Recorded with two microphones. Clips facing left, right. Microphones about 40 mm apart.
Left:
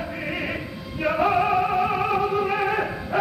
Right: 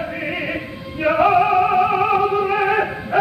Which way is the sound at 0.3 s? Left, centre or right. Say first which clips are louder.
Right 4 dB; centre.